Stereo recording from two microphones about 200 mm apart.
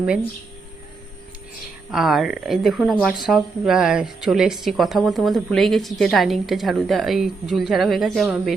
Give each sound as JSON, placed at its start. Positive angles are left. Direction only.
{"t": 1.9, "sound": "speech", "side_deg": 0}